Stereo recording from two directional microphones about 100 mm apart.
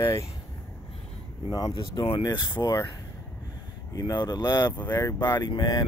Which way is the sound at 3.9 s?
40° left (ahead or behind).